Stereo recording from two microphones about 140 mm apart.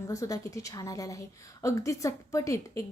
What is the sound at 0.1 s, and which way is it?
A woman's voice, 25° left (ahead or behind).